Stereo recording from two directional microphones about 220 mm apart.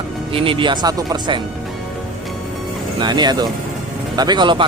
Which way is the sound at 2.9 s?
20° right (ahead or behind).